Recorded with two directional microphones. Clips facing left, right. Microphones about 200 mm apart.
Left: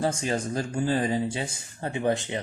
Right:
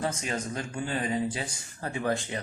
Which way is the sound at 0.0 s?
30° left (ahead or behind).